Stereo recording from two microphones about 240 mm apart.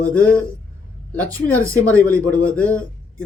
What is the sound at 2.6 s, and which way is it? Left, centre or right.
Speech, centre.